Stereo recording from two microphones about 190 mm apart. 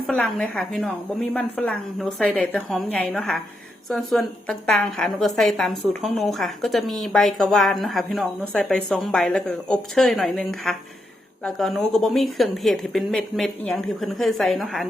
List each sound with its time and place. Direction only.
0.1 s a woman's voice: 5° left (ahead or behind)